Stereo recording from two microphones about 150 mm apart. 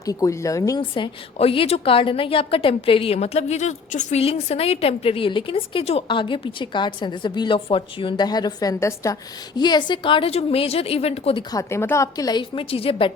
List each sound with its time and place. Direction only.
0.0 s a woman's voice: 25° left (ahead or behind)
0.8 s a woman's voice: 35° left (ahead or behind)
11.5 s a woman's voice: 15° left (ahead or behind); by 13.1 s 35° left (ahead or behind)